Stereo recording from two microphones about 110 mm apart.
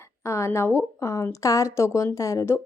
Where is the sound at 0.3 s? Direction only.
25° left (ahead or behind).